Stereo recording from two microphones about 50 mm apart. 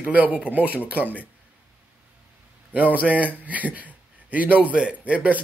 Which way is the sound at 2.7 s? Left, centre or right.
Right.